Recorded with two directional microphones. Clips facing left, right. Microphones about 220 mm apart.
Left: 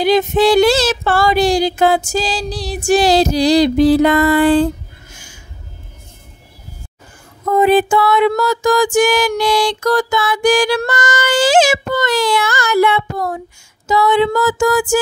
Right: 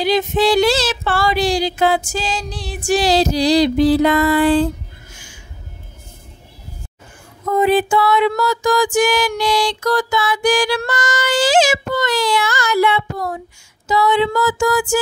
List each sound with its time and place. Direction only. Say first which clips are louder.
0.0 s music: left 4 dB; 50° left (ahead or behind)
7.5 s music: left 3 dB; 50° left (ahead or behind)